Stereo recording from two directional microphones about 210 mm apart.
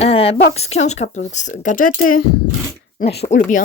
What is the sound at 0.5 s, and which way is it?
Speech, 30° left (ahead or behind).